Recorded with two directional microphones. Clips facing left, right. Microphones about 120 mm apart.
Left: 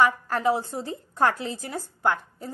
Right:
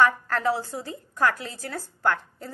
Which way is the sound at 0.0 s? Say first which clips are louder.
Even; 15° left (ahead or behind).